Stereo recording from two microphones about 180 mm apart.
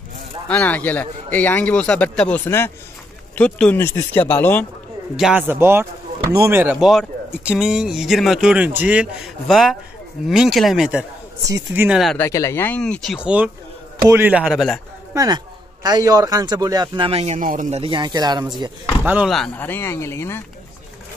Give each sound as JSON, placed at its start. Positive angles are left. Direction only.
{"t": 0.5, "sound": "a man's voice", "side_deg": 10}
{"t": 5.1, "sound": "speech", "side_deg": -5}
{"t": 11.4, "sound": "speech", "side_deg": -15}
{"t": 12.2, "sound": "a man's voice", "side_deg": 15}
{"t": 15.1, "sound": "a man's voice", "side_deg": -20}
{"t": 17.4, "sound": "a man's voice", "side_deg": -45}
{"t": 19.0, "sound": "a man's voice", "side_deg": -5}